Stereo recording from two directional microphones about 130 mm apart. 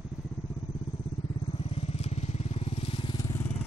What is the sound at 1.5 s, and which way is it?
Vehicle, 50° left (ahead or behind).